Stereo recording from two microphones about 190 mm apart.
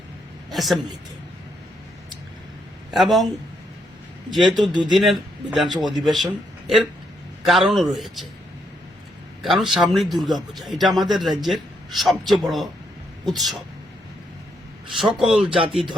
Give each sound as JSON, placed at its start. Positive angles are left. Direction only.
{"t": 0.5, "sound": "a woman's voice", "side_deg": 0}
{"t": 2.9, "sound": "a man's voice", "side_deg": 0}
{"t": 4.3, "sound": "a man's voice", "side_deg": 0}
{"t": 4.7, "sound": "speech", "side_deg": -25}
{"t": 4.9, "sound": "a man's voice", "side_deg": 0}
{"t": 5.6, "sound": "speech", "side_deg": -25}
{"t": 7.4, "sound": "a man's voice", "side_deg": 0}
{"t": 9.4, "sound": "a man's voice", "side_deg": 0}
{"t": 14.9, "sound": "a man's voice", "side_deg": 0}
{"t": 15.4, "sound": "speech", "side_deg": -25}
{"t": 15.7, "sound": "a man's voice", "side_deg": 0}